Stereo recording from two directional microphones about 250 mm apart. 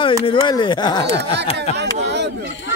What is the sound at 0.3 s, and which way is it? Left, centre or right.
Speech, centre.